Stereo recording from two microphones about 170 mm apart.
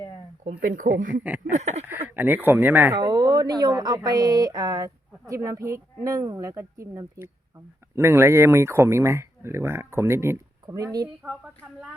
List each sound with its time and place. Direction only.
0.6 s a sound: 50° right (ahead or behind)
1.9 s speech: 10° right (ahead or behind)
2.9 s speech: 25° right (ahead or behind)